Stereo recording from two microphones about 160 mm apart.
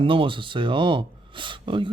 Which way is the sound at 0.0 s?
35° right (ahead or behind).